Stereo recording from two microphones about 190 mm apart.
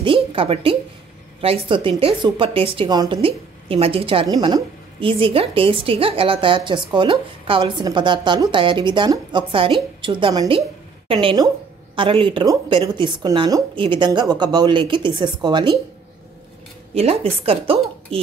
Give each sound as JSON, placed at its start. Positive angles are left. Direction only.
{"t": 0.0, "sound": "a woman's voice", "side_deg": -30}
{"t": 16.9, "sound": "speech", "side_deg": -30}